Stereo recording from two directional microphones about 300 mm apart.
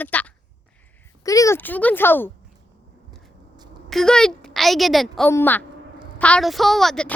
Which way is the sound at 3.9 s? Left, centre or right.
Centre.